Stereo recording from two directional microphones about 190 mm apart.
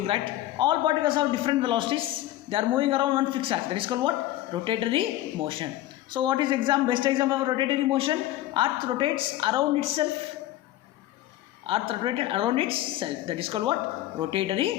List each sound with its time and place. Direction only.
0.0 s a man's voice: 30° right (ahead or behind)
11.6 s a man's voice: 30° right (ahead or behind)